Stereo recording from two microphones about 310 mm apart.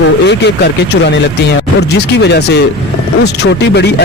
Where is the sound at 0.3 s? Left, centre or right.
Left.